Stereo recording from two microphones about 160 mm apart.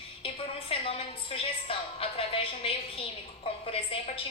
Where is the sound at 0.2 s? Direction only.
35° left (ahead or behind).